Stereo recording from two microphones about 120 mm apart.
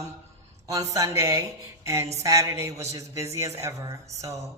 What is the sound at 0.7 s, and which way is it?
A man's voice, 30° right (ahead or behind).